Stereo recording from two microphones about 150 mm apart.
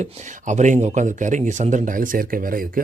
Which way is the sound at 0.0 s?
50° right (ahead or behind).